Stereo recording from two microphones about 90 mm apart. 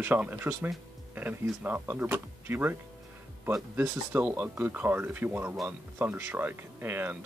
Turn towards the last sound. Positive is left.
turn(degrees=-25)  # may be behind; listen again after turning